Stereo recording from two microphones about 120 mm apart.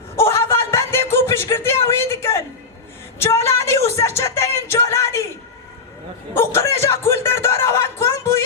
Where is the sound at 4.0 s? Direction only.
25° left (ahead or behind).